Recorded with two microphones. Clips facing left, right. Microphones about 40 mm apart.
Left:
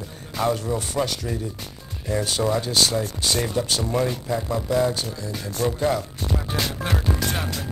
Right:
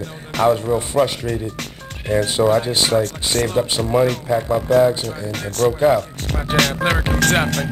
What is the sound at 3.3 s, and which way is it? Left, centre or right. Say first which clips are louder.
Speech: right 6 dB; right.